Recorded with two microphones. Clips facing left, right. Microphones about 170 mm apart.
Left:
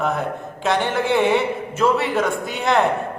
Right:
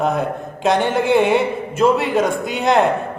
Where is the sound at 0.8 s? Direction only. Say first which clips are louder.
Right 3 dB; 15° right (ahead or behind).